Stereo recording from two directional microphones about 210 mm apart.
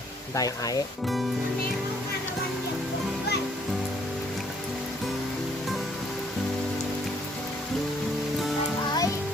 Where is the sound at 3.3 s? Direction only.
50° left (ahead or behind).